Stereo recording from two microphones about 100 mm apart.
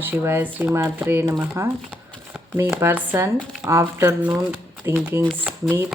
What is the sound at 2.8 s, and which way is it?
Speech, 20° right (ahead or behind).